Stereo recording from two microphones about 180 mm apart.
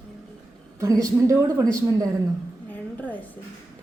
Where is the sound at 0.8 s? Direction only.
20° right (ahead or behind).